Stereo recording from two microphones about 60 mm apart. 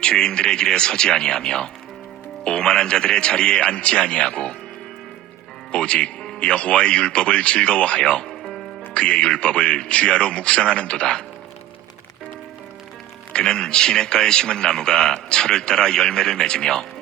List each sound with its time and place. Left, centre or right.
0.0 s a man's voice: centre
5.7 s a man's voice: centre
13.3 s a man's voice: centre